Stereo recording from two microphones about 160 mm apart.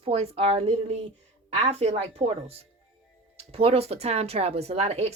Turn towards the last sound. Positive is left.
turn(degrees=-45)  # may be behind; listen again after turning